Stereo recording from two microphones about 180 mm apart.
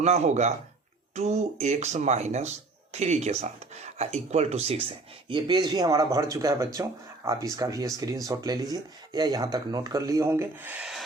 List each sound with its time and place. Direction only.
0.0 s speech: 40° right (ahead or behind); by 11.0 s 5° right (ahead or behind)